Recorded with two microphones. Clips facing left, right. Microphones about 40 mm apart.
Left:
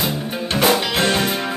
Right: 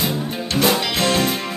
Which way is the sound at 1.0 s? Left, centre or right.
Left.